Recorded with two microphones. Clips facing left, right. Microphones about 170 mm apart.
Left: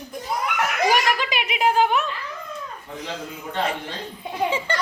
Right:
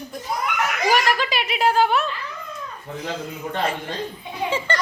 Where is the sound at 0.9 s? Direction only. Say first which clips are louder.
Right 3 dB; 15° left (ahead or behind).